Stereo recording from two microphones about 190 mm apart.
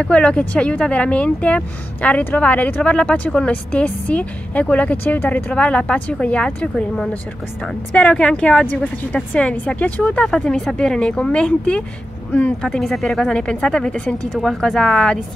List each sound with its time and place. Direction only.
0.0 s speech: 5° left (ahead or behind)